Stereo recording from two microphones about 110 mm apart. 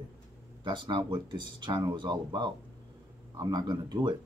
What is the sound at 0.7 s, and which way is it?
Speech, 45° right (ahead or behind).